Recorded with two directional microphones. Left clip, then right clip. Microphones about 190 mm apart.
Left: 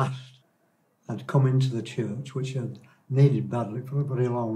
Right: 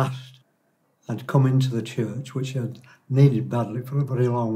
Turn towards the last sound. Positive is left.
turn(degrees=-25)  # may be behind; listen again after turning